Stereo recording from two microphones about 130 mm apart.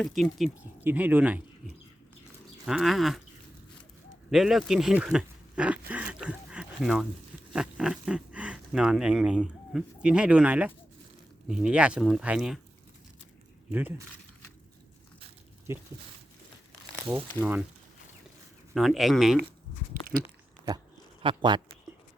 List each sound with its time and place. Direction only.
0.0 s speech: centre (ahead or behind)
0.9 s speech: 15° right (ahead or behind)
2.6 s speech: 5° right (ahead or behind)
4.3 s speech: centre (ahead or behind)
13.7 s speech: 15° right (ahead or behind)
15.7 s speech: 20° right (ahead or behind)
18.7 s speech: centre (ahead or behind)
21.2 s speech: 40° right (ahead or behind)